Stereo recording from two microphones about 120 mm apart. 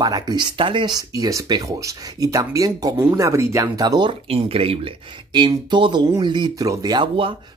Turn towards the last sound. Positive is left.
turn(degrees=-40)  # may be behind; listen again after turning